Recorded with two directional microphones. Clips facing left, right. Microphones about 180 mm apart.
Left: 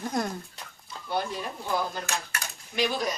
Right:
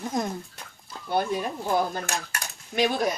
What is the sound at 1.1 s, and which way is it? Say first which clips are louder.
Speech: right 5 dB; 50° right (ahead or behind).